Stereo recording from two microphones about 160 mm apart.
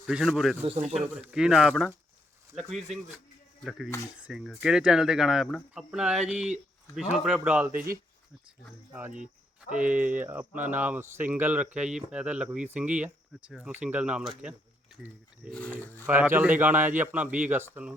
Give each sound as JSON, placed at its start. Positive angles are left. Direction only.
{"t": 0.0, "sound": "speech", "side_deg": -5}
{"t": 0.6, "sound": "speech", "side_deg": -40}
{"t": 0.9, "sound": "speech", "side_deg": -5}
{"t": 8.9, "sound": "speech", "side_deg": -10}
{"t": 15.4, "sound": "speech", "side_deg": 10}
{"t": 16.0, "sound": "speech", "side_deg": -15}